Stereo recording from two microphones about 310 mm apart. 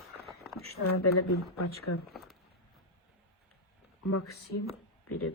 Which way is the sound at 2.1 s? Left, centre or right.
Centre.